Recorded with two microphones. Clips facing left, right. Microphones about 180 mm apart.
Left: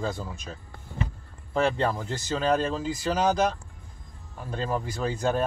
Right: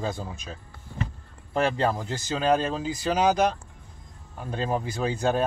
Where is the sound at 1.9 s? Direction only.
15° right (ahead or behind).